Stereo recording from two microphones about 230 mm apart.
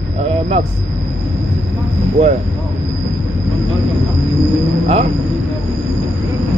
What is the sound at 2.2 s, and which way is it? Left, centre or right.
Speech, right.